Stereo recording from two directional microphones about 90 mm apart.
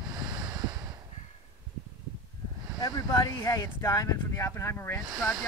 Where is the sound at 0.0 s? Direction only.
50° right (ahead or behind).